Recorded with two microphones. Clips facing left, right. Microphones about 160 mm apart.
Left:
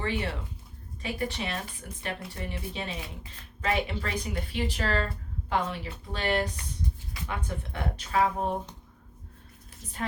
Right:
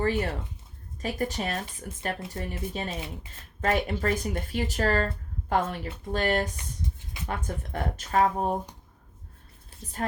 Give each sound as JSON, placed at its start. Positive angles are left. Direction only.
{"t": 0.0, "sound": "speech", "side_deg": -45}